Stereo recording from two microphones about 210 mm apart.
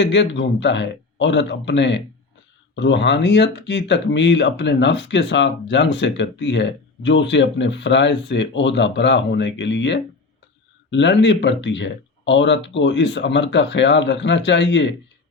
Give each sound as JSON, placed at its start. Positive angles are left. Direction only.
{"t": 0.0, "sound": "speech", "side_deg": 60}